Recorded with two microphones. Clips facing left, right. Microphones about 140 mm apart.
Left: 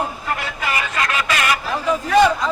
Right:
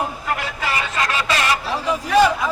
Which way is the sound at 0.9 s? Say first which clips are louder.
Right 1 dB; 30° right (ahead or behind).